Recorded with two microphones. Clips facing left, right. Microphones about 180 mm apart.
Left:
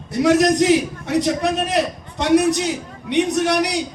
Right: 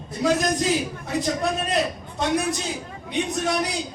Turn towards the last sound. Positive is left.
turn(degrees=75)  # may be behind; listen again after turning